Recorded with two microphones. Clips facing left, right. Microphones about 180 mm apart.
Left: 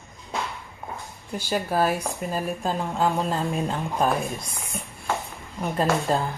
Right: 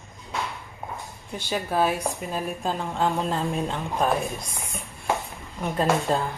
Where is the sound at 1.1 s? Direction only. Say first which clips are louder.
Left 3 dB; centre (ahead or behind).